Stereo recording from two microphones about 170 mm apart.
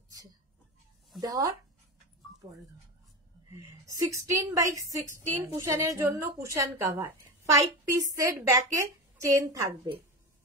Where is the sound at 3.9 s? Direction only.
20° right (ahead or behind).